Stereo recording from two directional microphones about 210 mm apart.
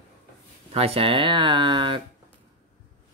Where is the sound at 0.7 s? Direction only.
25° right (ahead or behind).